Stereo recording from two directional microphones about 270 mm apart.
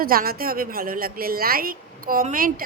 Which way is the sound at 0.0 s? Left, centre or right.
Right.